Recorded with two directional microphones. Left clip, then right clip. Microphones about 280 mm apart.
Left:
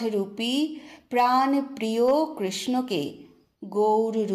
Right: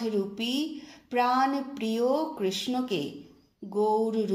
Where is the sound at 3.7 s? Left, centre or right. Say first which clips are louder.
Left 4 dB; left.